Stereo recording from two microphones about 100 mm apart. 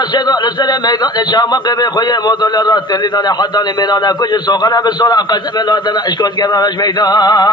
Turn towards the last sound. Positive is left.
turn(degrees=45)  # may be behind; listen again after turning